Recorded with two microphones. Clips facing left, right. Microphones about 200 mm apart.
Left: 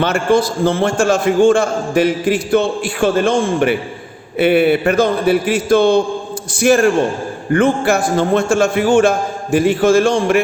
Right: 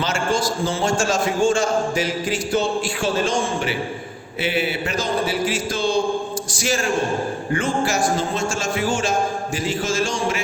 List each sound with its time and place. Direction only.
0.0 s a man's voice: 60° left (ahead or behind)